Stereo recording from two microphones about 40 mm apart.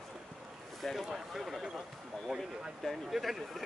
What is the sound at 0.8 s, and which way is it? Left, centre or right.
Speech, centre.